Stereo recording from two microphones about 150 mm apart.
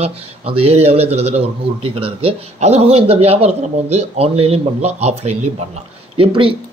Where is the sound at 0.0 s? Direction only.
40° right (ahead or behind).